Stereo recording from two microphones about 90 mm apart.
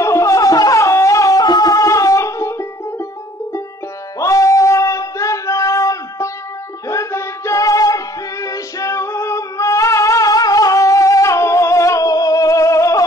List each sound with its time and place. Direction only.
0.0 s music: 35° left (ahead or behind)
4.2 s a sound: 35° left (ahead or behind)
6.9 s music: 35° left (ahead or behind)